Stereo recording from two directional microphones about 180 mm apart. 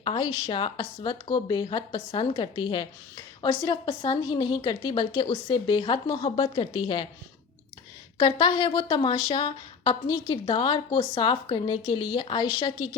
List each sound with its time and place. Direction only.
0.0 s a woman's voice: 30° left (ahead or behind)
8.2 s a woman's voice: 25° left (ahead or behind)